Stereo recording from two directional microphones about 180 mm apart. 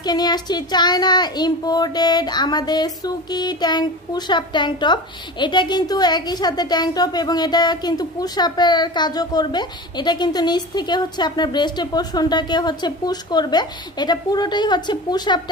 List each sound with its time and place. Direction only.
0.0 s speech: 20° left (ahead or behind)